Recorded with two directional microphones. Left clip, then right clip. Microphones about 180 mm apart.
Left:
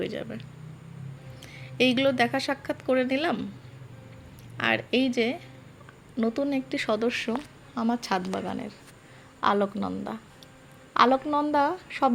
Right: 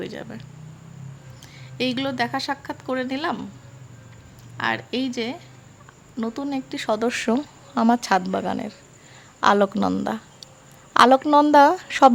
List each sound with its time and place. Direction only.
0.0 s a woman's voice: 10° right (ahead or behind)
4.5 s a woman's voice: 5° right (ahead or behind)
7.0 s a woman's voice: 25° right (ahead or behind)
9.7 s a woman's voice: 35° right (ahead or behind)